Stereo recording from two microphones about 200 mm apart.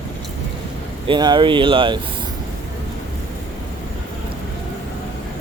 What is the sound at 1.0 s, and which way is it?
Speech, 20° right (ahead or behind).